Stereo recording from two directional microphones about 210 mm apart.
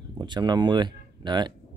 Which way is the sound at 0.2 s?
20° right (ahead or behind).